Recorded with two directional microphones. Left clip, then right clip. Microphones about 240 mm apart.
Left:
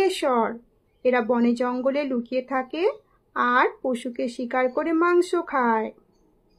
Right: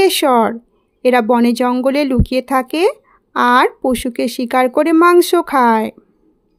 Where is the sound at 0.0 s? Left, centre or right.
Right.